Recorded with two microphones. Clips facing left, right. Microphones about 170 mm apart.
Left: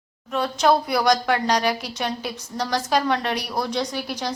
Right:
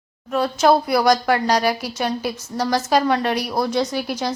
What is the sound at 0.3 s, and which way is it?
A woman's voice, centre (ahead or behind).